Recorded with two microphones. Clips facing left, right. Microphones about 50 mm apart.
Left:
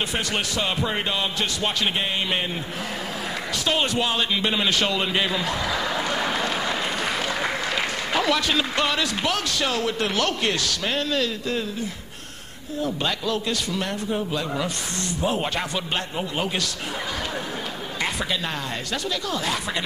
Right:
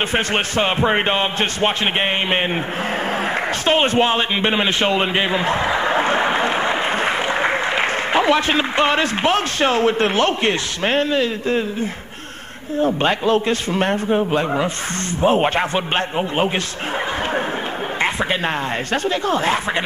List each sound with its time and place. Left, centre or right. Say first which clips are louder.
0.1 s speech: right 7 dB; right
3.6 s a man's voice: right 7 dB; right
19.0 s speech: right 8 dB; right